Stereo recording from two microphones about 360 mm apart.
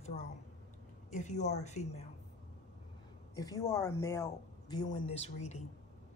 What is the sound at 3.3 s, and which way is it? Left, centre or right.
Speech, centre.